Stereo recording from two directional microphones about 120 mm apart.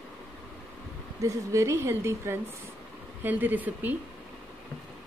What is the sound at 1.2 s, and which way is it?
A woman's voice, 25° right (ahead or behind).